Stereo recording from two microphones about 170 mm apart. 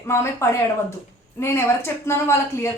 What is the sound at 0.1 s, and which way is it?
A woman's voice, 15° left (ahead or behind).